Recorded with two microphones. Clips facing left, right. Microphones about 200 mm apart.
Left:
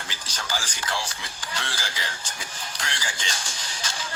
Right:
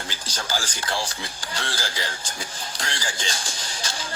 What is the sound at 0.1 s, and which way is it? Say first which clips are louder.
Speech: right 2 dB; 35° right (ahead or behind).